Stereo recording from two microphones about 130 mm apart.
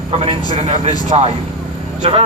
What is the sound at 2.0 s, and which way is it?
Speech, 45° right (ahead or behind).